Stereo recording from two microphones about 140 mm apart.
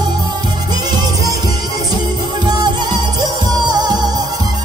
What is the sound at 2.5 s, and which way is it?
Music, 30° right (ahead or behind).